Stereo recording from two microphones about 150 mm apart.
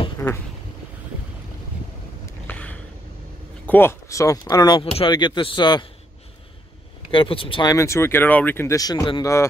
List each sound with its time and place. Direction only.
0.2 s duck: 20° left (ahead or behind)
2.4 s a sound: 10° left (ahead or behind)
3.6 s speech: 15° left (ahead or behind); by 5.9 s 30° left (ahead or behind)
7.1 s speech: 35° left (ahead or behind)
7.7 s speech: 20° left (ahead or behind)